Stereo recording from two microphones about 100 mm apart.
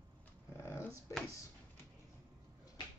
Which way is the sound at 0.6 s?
25° left (ahead or behind).